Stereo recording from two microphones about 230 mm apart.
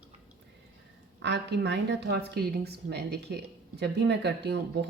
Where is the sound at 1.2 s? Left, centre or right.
Right.